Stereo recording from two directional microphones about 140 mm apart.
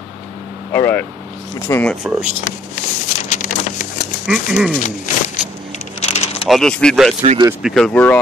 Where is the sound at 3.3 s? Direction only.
65° left (ahead or behind).